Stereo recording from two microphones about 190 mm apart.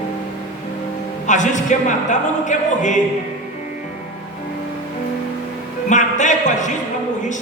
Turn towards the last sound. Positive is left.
turn(degrees=40)  # may be behind; listen again after turning